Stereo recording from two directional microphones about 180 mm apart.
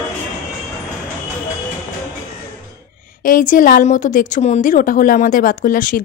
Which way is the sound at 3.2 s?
50° left (ahead or behind).